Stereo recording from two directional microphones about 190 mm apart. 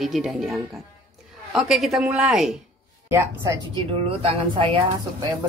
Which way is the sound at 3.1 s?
15° right (ahead or behind).